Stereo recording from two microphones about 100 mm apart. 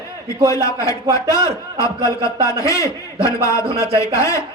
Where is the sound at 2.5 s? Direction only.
30° left (ahead or behind).